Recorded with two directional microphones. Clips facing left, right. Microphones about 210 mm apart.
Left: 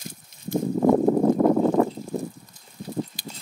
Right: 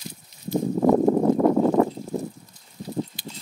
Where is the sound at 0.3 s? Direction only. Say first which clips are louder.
Right 1 dB; 50° left (ahead or behind).